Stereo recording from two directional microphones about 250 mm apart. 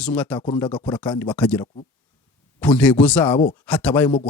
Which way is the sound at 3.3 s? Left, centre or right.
Centre.